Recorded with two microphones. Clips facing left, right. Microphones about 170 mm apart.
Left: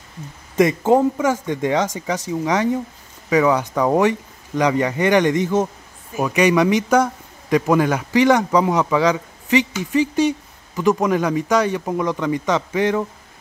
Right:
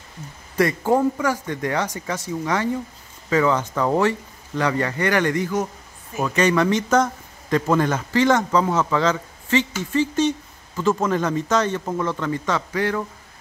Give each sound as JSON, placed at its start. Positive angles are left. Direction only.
{"t": 0.6, "sound": "speech", "side_deg": 20}